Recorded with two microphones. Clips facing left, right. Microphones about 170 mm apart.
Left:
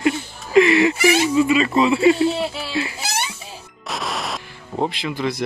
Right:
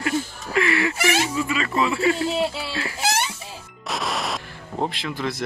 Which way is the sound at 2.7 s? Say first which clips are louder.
Left 5 dB; 20° left (ahead or behind).